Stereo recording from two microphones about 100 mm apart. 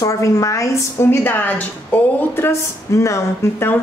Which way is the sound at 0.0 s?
30° left (ahead or behind).